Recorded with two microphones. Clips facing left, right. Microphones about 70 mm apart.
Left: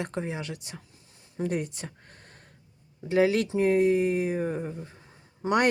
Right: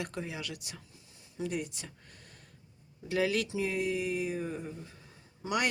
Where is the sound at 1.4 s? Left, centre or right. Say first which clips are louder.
Left 6 dB; left.